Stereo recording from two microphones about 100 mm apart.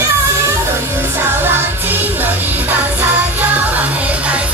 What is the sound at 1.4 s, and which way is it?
Music, 20° right (ahead or behind).